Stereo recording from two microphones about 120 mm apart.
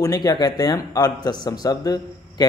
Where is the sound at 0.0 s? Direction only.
30° left (ahead or behind).